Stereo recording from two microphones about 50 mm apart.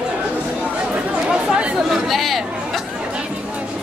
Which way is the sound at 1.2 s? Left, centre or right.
Centre.